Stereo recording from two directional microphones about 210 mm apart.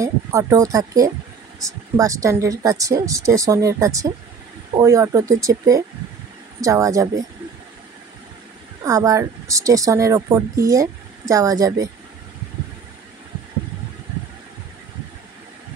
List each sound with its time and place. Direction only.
0.0 s speech: 15° right (ahead or behind)
8.8 s speech: 15° right (ahead or behind)